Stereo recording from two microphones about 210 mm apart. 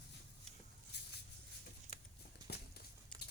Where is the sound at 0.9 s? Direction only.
55° left (ahead or behind).